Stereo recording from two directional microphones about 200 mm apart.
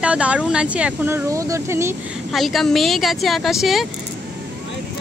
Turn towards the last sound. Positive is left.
turn(degrees=0)  # may be behind; listen again after turning